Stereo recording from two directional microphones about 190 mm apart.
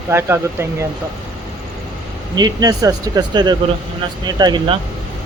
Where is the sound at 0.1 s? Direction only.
15° right (ahead or behind).